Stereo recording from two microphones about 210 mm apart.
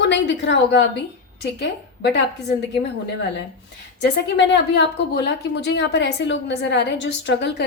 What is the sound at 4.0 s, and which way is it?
A woman's voice, 55° left (ahead or behind).